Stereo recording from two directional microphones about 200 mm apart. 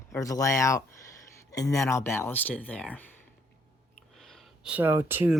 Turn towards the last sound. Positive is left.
turn(degrees=-10)  # may be behind; listen again after turning